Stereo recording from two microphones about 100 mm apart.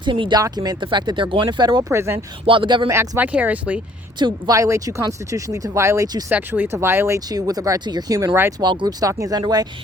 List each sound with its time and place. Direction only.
0.0 s speech: 55° right (ahead or behind)
0.3 s speech: 40° right (ahead or behind)
1.9 s speech: 25° right (ahead or behind)
2.5 s a sound: 55° right (ahead or behind)
2.9 s speech: 25° right (ahead or behind)
3.3 s speech: 15° right (ahead or behind)
4.2 s speech: 50° right (ahead or behind)
4.5 s speech: 30° right (ahead or behind)
6.3 s speech: 20° right (ahead or behind)
7.3 s speech: 40° right (ahead or behind)
8.3 s speech: 20° right (ahead or behind)
8.6 s speech: 50° right (ahead or behind)